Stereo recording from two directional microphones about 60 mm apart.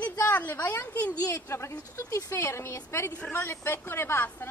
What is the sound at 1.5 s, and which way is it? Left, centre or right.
A woman's voice, left.